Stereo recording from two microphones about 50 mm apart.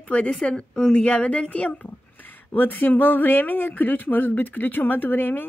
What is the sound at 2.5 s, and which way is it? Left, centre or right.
Speech, left.